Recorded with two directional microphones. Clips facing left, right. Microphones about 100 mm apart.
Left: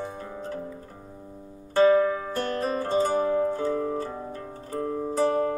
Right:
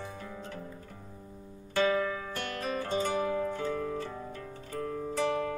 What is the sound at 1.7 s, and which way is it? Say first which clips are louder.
Music: left 9 dB; 35° left (ahead or behind).